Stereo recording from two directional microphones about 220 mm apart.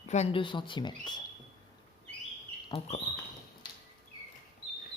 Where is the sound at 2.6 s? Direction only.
25° left (ahead or behind).